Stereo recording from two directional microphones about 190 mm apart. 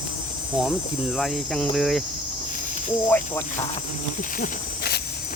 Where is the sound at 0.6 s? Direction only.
Centre (ahead or behind).